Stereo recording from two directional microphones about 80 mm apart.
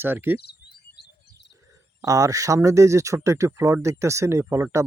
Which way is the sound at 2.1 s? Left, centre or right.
Right.